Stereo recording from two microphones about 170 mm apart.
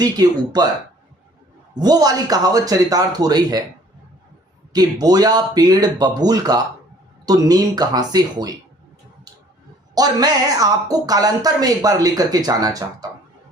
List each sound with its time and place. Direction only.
0.0 s speech: 25° right (ahead or behind)
1.7 s speech: 25° right (ahead or behind)
4.7 s speech: 25° right (ahead or behind)
9.9 s speech: 25° right (ahead or behind)